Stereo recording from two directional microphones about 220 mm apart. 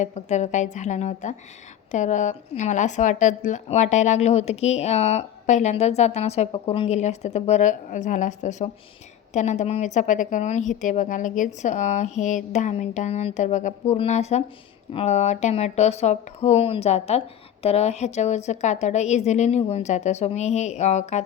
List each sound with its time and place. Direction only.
0.0 s speech: 30° left (ahead or behind)